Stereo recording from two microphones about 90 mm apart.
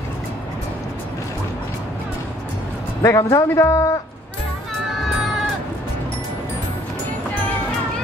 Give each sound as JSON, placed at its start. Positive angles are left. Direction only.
{"t": 3.0, "sound": "a man's voice", "side_deg": 35}